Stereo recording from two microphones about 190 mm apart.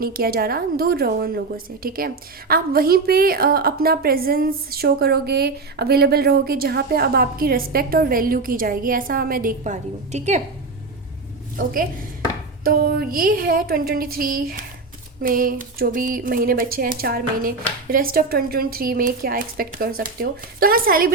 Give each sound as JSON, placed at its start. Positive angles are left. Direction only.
{"t": 0.0, "sound": "a woman's voice", "side_deg": -50}
{"t": 11.5, "sound": "a woman's voice", "side_deg": -50}